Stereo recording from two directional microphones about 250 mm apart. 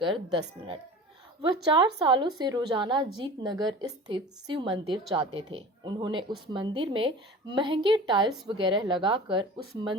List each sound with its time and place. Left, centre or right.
0.0 s a woman's voice: centre